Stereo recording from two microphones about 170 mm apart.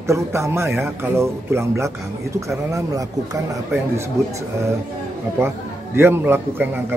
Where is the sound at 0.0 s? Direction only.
15° right (ahead or behind).